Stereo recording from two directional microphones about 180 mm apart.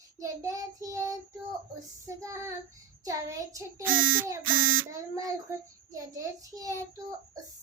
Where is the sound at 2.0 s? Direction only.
15° right (ahead or behind).